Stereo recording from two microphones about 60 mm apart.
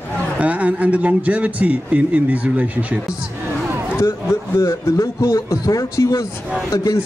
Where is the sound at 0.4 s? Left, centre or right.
Right.